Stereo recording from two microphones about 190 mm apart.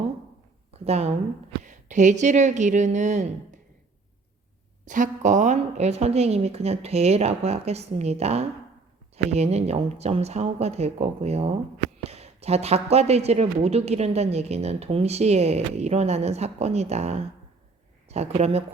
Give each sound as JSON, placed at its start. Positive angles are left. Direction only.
{"t": 0.7, "sound": "speech", "side_deg": -35}
{"t": 4.9, "sound": "a woman's voice", "side_deg": -40}